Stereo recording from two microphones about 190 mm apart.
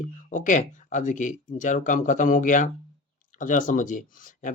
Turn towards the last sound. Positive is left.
turn(degrees=45)  # may be behind; listen again after turning